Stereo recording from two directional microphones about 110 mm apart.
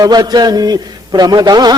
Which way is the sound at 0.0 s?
40° right (ahead or behind).